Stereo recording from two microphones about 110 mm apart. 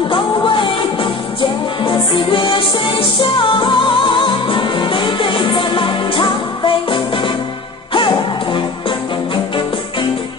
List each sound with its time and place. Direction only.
0.1 s music: 50° left (ahead or behind)